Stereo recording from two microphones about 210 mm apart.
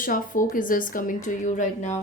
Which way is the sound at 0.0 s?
40° left (ahead or behind).